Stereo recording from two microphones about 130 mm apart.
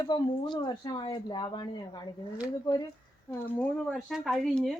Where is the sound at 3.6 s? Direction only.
Centre (ahead or behind).